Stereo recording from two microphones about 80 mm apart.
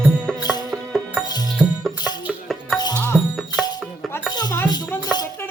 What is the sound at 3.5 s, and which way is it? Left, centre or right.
Music, left.